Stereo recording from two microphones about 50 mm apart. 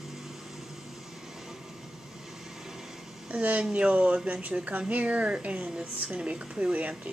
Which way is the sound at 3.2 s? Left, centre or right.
Right.